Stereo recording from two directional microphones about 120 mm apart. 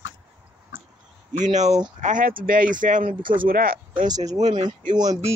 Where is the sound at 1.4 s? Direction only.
75° right (ahead or behind).